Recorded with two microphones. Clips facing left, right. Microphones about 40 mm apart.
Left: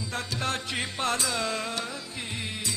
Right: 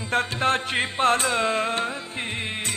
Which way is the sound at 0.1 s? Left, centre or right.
Right.